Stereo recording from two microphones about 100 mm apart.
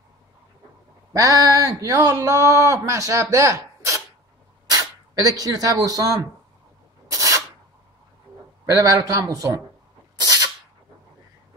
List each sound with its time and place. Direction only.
1.1 s speech: 35° right (ahead or behind)
4.6 s sneeze: 40° right (ahead or behind)
5.8 s speech: 40° right (ahead or behind)
7.1 s rub: 35° right (ahead or behind)
8.6 s speech: 35° right (ahead or behind)
10.1 s sneeze: 40° right (ahead or behind)